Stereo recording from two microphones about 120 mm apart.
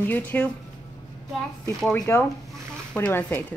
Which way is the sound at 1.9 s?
20° left (ahead or behind).